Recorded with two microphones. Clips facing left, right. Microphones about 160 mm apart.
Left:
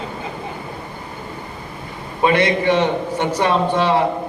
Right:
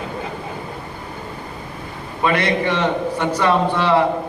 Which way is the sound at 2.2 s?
25° left (ahead or behind).